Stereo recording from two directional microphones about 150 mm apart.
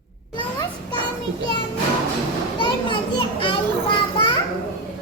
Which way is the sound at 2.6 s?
35° left (ahead or behind).